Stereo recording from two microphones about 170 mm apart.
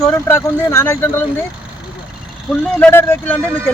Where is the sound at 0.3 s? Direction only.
15° left (ahead or behind).